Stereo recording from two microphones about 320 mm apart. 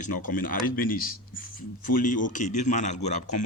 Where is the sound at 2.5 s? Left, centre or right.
Left.